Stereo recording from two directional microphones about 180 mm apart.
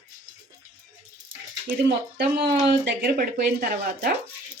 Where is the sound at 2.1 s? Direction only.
65° right (ahead or behind).